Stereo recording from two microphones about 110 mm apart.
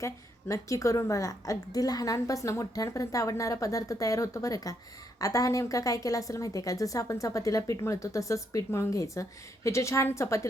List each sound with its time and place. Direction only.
0.0 s a woman's voice: 30° left (ahead or behind)